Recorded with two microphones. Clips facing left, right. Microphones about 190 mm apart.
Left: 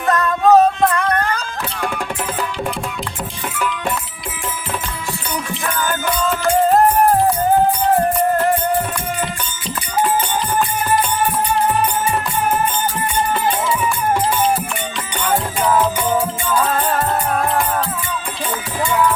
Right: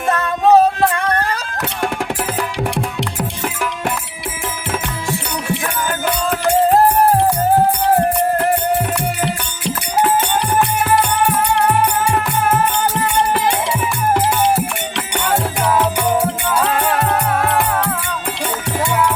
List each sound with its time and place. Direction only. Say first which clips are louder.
0.1 s music: even; 30° right (ahead or behind)
9.2 s music: right 4 dB; 65° right (ahead or behind)
14.5 s music: right 2 dB; 70° right (ahead or behind)
16.0 s music: right 2 dB; 20° right (ahead or behind)